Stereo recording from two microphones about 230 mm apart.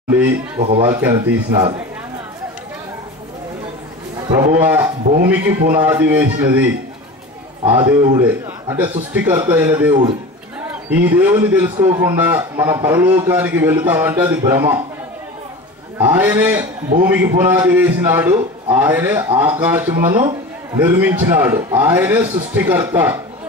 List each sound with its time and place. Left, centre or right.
0.6 s speech: right
0.8 s a man's voice: centre
4.3 s a man's voice: centre
7.8 s a man's voice: centre
16.0 s a man's voice: centre